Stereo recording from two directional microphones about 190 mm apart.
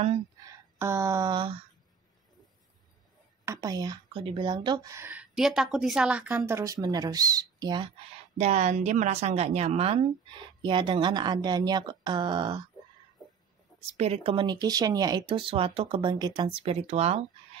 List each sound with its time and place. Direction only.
0.4 s speech: 15° right (ahead or behind)
3.4 s speech: 20° right (ahead or behind)
8.4 s speech: 35° right (ahead or behind)
13.7 s speech: 35° right (ahead or behind)